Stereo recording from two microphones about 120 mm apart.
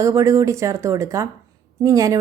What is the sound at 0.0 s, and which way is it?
A woman's voice, 25° right (ahead or behind).